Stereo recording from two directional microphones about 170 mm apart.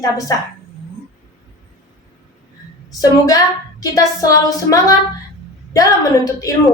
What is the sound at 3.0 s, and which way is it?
A woman's voice, 20° left (ahead or behind).